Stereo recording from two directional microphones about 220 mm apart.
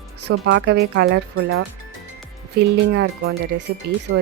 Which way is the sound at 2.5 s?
50° right (ahead or behind).